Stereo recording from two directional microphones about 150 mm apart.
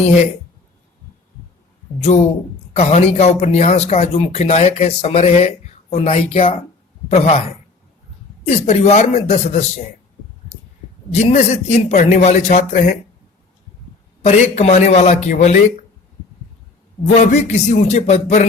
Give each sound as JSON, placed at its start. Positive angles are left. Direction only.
{"t": 2.1, "sound": "speech", "side_deg": 50}
{"t": 8.4, "sound": "speech", "side_deg": 45}
{"t": 11.1, "sound": "speech", "side_deg": 50}
{"t": 14.3, "sound": "speech", "side_deg": 45}
{"t": 17.2, "sound": "speech", "side_deg": 50}